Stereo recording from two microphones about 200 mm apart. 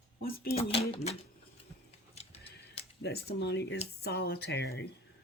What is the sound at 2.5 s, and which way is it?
Speech, 55° left (ahead or behind).